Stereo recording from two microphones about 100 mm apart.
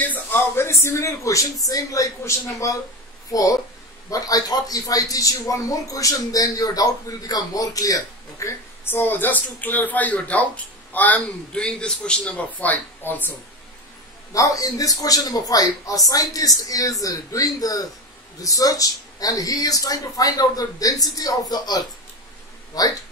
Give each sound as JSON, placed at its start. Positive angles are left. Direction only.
{"t": 0.0, "sound": "speech", "side_deg": 20}
{"t": 14.3, "sound": "speech", "side_deg": 35}